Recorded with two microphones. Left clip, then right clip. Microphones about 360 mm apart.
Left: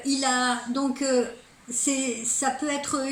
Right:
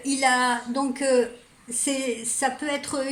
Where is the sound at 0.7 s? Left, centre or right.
Right.